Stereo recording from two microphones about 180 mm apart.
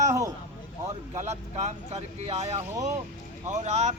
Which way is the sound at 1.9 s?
35° right (ahead or behind).